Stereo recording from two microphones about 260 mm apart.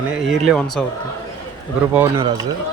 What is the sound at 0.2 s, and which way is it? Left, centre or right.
Speech, centre.